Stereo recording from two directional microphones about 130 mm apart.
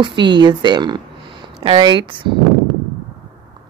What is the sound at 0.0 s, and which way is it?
Speech, 35° right (ahead or behind).